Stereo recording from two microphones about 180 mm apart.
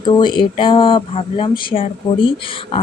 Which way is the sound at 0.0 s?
25° left (ahead or behind).